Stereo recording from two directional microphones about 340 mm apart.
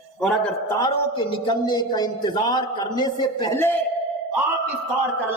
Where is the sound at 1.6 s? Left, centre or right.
Centre.